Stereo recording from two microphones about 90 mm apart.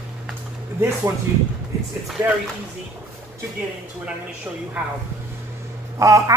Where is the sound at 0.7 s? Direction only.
35° right (ahead or behind).